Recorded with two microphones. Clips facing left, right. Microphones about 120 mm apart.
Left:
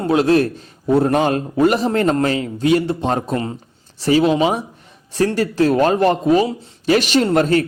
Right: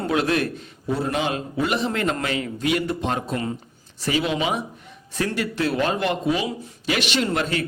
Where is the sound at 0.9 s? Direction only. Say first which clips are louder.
Left 9 dB; 50° left (ahead or behind).